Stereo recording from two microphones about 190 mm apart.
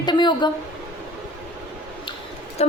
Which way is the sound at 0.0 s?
25° left (ahead or behind).